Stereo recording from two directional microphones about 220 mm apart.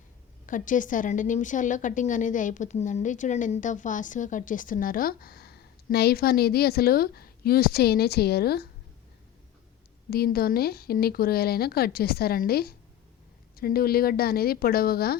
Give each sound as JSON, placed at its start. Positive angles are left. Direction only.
{"t": 0.4, "sound": "a woman's voice", "side_deg": 35}
{"t": 10.1, "sound": "speech", "side_deg": 45}